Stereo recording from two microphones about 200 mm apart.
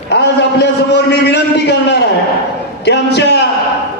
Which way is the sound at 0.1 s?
55° left (ahead or behind).